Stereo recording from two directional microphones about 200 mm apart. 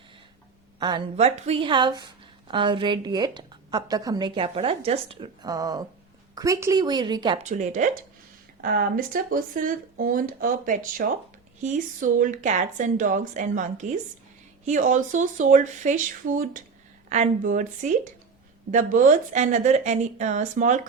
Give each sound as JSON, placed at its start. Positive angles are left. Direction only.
{"t": 0.8, "sound": "a woman's voice", "side_deg": -20}
{"t": 7.4, "sound": "a woman's voice", "side_deg": -40}